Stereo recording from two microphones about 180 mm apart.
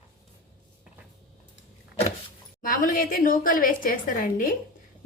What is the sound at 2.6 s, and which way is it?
A woman's voice, 50° left (ahead or behind).